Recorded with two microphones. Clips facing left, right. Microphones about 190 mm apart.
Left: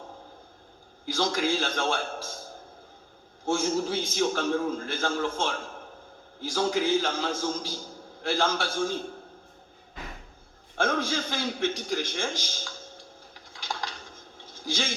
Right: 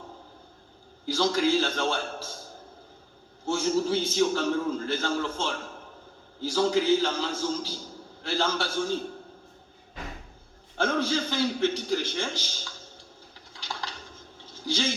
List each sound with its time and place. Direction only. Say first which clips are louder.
1.1 s a man's voice: right 3 dB; 50° left (ahead or behind)
3.4 s a man's voice: right 1 dB; 50° left (ahead or behind)
6.5 s a man's voice: right 2 dB; 50° left (ahead or behind)
10.8 s a man's voice: right 1 dB; 50° left (ahead or behind)
13.5 s a sound: left 2 dB; 50° left (ahead or behind)